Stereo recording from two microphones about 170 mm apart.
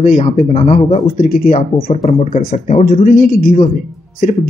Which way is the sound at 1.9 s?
35° left (ahead or behind).